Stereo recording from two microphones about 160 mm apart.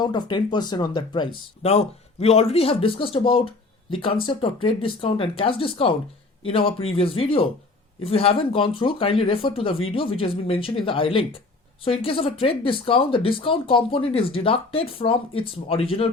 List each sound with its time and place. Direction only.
0.0 s speech: 25° left (ahead or behind)